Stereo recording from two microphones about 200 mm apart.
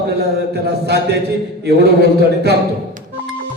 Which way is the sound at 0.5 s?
55° right (ahead or behind).